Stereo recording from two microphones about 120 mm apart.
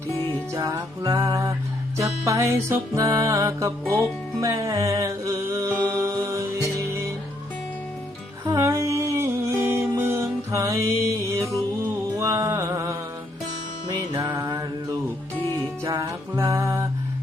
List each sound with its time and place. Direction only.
0.5 s music: 30° right (ahead or behind)
8.4 s music: 25° right (ahead or behind)
14.3 s mantra: 25° right (ahead or behind)
15.8 s music: 30° right (ahead or behind)